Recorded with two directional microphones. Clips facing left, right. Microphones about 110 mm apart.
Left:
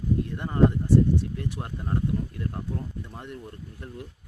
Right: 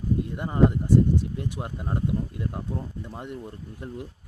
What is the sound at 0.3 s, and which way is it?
Speech, 15° right (ahead or behind).